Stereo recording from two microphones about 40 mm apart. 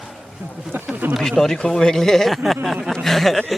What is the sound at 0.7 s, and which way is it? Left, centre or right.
Speech, right.